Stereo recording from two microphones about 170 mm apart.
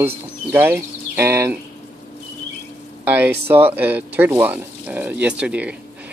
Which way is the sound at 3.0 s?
10° right (ahead or behind).